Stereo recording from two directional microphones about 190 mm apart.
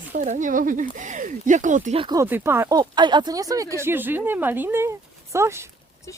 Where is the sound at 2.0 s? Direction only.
25° right (ahead or behind).